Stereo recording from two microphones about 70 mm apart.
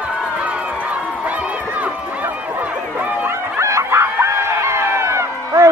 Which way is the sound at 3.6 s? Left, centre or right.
Right.